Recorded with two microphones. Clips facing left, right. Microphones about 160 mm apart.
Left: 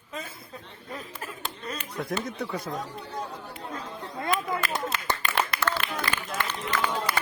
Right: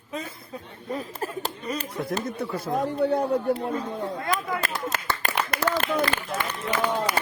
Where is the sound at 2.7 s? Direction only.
60° right (ahead or behind).